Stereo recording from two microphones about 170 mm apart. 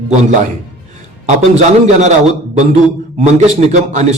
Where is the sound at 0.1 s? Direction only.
45° right (ahead or behind).